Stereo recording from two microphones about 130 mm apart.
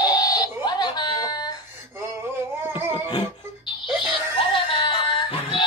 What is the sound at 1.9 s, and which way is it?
Music, 20° right (ahead or behind).